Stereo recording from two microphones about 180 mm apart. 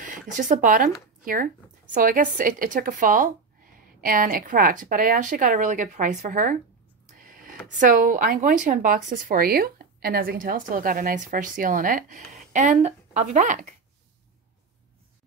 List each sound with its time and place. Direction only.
0.0 s speech: 45° right (ahead or behind)